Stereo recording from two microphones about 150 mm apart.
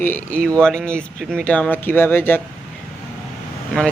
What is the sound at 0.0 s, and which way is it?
Speech, 10° left (ahead or behind).